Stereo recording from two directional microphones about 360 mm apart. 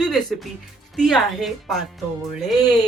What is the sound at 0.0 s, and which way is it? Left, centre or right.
Music, centre.